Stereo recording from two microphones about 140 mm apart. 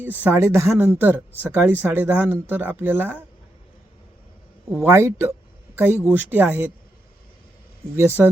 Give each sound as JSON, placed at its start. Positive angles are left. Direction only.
{"t": 0.0, "sound": "speech", "side_deg": -15}
{"t": 4.7, "sound": "speech", "side_deg": -15}
{"t": 7.9, "sound": "speech", "side_deg": -15}